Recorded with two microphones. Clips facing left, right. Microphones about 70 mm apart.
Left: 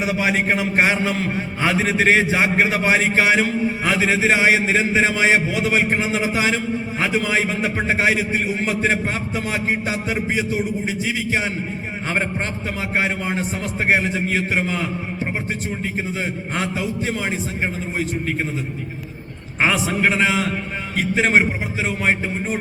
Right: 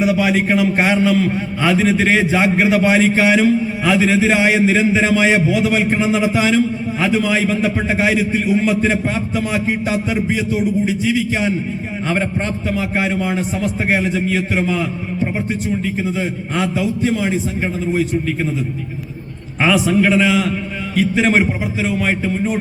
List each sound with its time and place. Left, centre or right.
0.0 s a man's voice: left
12.7 s a man's voice: left
16.7 s a man's voice: left
19.6 s a man's voice: left